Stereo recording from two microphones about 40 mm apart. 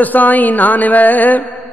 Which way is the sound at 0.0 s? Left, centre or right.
Left.